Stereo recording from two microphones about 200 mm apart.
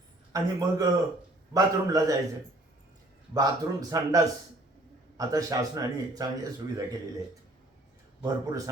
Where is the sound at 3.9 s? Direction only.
15° right (ahead or behind).